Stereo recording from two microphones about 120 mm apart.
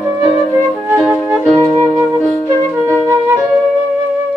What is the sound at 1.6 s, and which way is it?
Flute, 15° left (ahead or behind).